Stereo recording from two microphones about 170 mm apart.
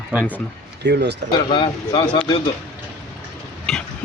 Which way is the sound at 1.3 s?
30° left (ahead or behind).